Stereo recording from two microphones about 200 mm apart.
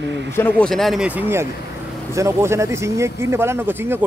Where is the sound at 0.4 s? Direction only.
10° left (ahead or behind).